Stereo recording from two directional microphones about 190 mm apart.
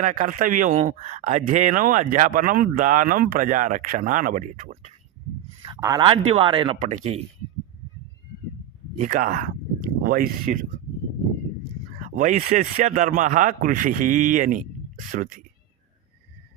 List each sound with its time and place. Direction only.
0.0 s speech: 45° right (ahead or behind)
5.6 s speech: 20° right (ahead or behind)
6.8 s speech: 40° right (ahead or behind)
9.0 s speech: 40° right (ahead or behind)
11.9 s speech: 40° right (ahead or behind)